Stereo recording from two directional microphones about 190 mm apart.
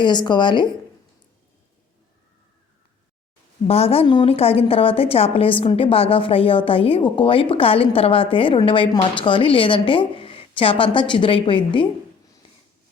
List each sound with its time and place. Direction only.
0.0 s a woman's voice: 25° left (ahead or behind)
3.7 s a woman's voice: 30° left (ahead or behind)